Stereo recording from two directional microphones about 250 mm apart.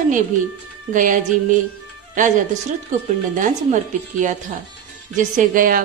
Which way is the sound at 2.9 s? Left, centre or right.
Right.